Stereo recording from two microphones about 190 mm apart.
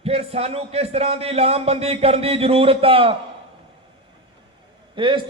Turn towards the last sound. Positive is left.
turn(degrees=-25)  # may be behind; listen again after turning